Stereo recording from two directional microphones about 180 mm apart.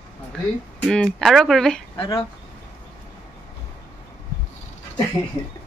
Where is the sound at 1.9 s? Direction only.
30° left (ahead or behind).